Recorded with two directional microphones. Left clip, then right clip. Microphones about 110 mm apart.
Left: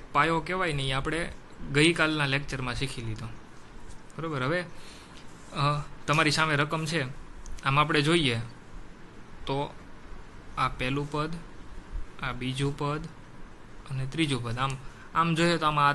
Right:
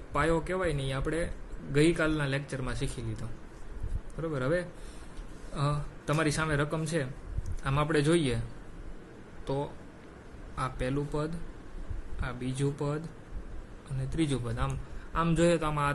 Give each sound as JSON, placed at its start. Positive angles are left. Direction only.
{"t": 0.1, "sound": "speech", "side_deg": 15}
{"t": 9.4, "sound": "a man's voice", "side_deg": 20}